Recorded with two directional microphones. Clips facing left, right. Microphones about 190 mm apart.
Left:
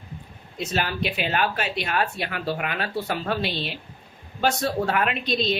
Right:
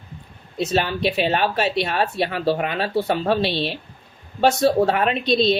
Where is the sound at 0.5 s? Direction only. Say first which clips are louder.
Right 6 dB; 25° right (ahead or behind).